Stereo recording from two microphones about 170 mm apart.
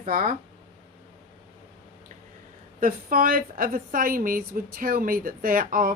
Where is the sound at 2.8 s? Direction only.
55° right (ahead or behind).